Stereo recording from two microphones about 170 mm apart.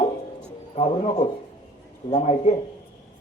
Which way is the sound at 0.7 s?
35° left (ahead or behind).